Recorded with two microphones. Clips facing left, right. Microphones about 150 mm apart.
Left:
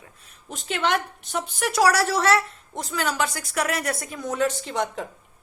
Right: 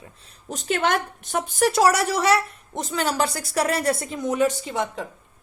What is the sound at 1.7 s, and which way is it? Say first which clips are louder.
A woman's voice: even; 25° right (ahead or behind).